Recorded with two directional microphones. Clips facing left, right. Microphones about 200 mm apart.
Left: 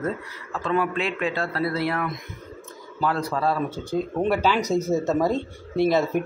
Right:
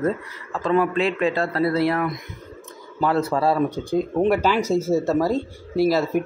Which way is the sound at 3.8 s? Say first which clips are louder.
Right 2 dB; 10° right (ahead or behind).